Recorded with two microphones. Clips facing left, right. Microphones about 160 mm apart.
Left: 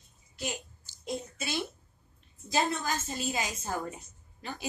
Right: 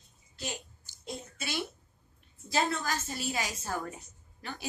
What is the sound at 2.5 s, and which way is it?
A woman's voice, 20° left (ahead or behind).